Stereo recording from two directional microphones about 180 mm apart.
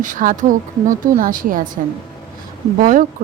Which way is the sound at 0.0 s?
50° right (ahead or behind).